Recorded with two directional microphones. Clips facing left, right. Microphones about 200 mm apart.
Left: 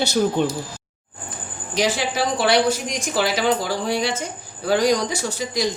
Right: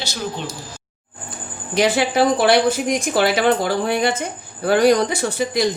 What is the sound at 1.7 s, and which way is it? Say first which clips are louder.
Speech: right 5 dB; 60° right (ahead or behind).